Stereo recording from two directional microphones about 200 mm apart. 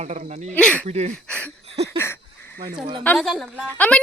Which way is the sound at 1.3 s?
5° left (ahead or behind).